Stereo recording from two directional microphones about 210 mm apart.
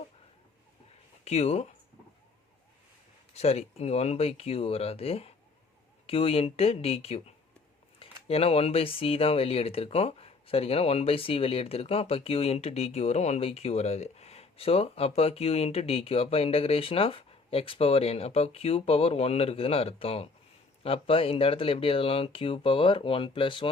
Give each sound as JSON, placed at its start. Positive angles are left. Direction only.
{"t": 1.2, "sound": "speech", "side_deg": 30}
{"t": 3.3, "sound": "speech", "side_deg": 30}